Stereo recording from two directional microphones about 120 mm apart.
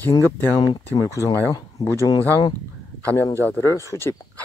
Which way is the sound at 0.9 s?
25° left (ahead or behind).